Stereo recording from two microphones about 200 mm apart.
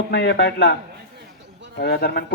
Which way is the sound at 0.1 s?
60° left (ahead or behind).